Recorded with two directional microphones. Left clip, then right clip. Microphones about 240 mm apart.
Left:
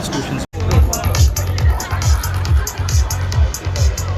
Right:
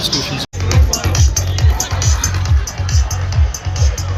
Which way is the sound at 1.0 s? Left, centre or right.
Left.